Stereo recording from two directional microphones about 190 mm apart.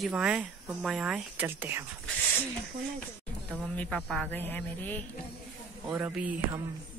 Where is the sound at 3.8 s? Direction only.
5° left (ahead or behind).